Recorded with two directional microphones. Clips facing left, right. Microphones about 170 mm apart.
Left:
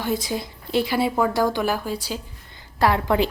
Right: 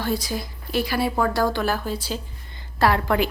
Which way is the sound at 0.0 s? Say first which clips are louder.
Left 1 dB; 20° left (ahead or behind).